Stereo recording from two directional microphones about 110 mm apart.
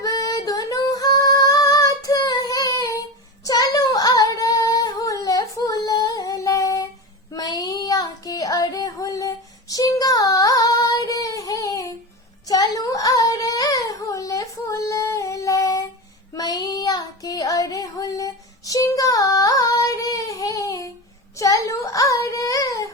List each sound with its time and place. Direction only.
0.0 s singing: 35° left (ahead or behind)
7.3 s child singing: 35° left (ahead or behind)
12.5 s a sound: 35° left (ahead or behind)
16.3 s child singing: 35° left (ahead or behind)